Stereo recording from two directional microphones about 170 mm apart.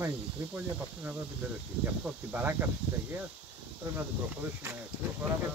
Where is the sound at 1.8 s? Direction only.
10° right (ahead or behind).